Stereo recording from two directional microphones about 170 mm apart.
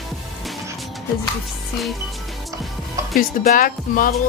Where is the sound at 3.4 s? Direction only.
55° left (ahead or behind).